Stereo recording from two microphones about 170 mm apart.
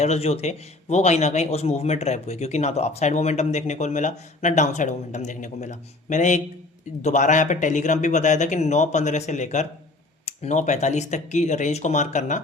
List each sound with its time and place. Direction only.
0.0 s a man's voice: 40° left (ahead or behind)